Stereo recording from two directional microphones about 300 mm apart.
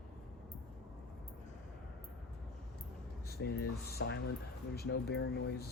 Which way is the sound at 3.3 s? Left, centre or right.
Left.